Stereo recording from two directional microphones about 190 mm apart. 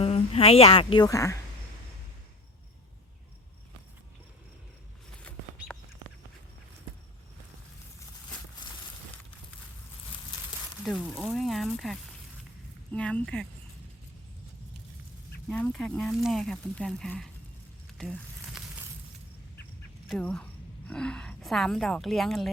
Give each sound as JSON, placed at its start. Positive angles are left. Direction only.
{"t": 0.0, "sound": "a woman's voice", "side_deg": 30}
{"t": 5.7, "sound": "a sound", "side_deg": 5}
{"t": 10.8, "sound": "speech", "side_deg": -5}
{"t": 15.4, "sound": "speech", "side_deg": 5}
{"t": 17.9, "sound": "a sound", "side_deg": 0}
{"t": 20.1, "sound": "a woman's voice", "side_deg": 5}